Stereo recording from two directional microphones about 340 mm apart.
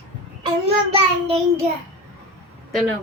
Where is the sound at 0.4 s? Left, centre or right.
Centre.